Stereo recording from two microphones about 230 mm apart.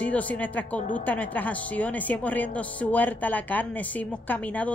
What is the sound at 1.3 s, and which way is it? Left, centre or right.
Speech, centre.